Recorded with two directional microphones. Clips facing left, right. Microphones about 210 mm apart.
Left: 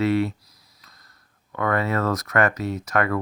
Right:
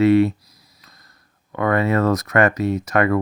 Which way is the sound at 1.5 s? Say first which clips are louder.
Right 5 dB; 20° right (ahead or behind).